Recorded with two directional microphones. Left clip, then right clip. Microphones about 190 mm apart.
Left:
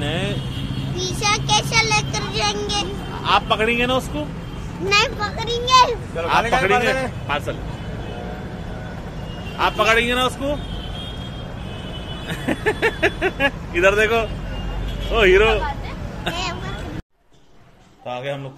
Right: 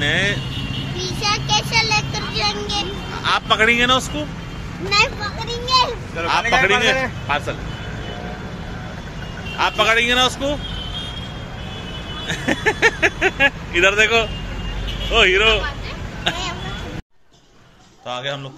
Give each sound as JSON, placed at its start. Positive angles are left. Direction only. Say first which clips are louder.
{"t": 0.0, "sound": "vehicle", "louder": "right 6 dB", "side_deg": 0}
{"t": 0.9, "sound": "vehicle", "louder": "left 1 dB", "side_deg": 15}
{"t": 3.2, "sound": "speech", "louder": "right 1 dB", "side_deg": 0}
{"t": 4.9, "sound": "speech", "louder": "right 1 dB", "side_deg": 15}
{"t": 6.2, "sound": "speech", "louder": "right 1 dB", "side_deg": 0}
{"t": 9.6, "sound": "speech", "louder": "right 1 dB", "side_deg": 0}
{"t": 12.3, "sound": "speech", "louder": "right 3 dB", "side_deg": 0}
{"t": 18.1, "sound": "a man's voice", "louder": "right 2 dB", "side_deg": 20}